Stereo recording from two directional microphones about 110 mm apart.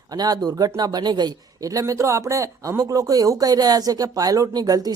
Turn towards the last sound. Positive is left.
turn(degrees=-35)  # may be behind; listen again after turning